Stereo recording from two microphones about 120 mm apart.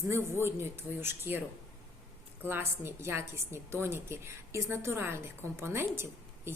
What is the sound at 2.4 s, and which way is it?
A woman's voice, 20° right (ahead or behind).